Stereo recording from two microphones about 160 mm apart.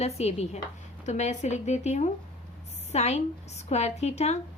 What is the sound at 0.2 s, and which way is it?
A woman's voice, 40° left (ahead or behind).